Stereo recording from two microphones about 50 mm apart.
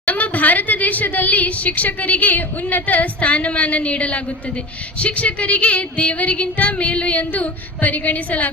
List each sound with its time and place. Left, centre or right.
0.0 s a woman's voice: left
4.9 s female singing: left